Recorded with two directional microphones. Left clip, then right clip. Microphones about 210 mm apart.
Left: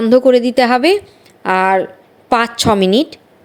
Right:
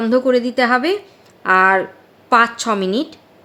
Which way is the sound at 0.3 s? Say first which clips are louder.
Left 4 dB; 25° left (ahead or behind).